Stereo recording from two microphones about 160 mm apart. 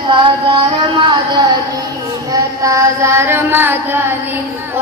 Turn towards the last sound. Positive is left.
turn(degrees=-15)  # may be behind; listen again after turning